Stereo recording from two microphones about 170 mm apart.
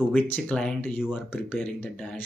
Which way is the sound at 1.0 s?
5° right (ahead or behind).